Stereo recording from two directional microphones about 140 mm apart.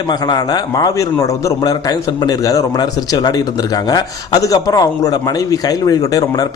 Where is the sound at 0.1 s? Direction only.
30° left (ahead or behind).